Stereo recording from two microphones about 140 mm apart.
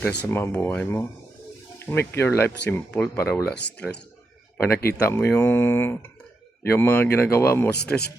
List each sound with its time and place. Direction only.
0.0 s speech: 10° left (ahead or behind)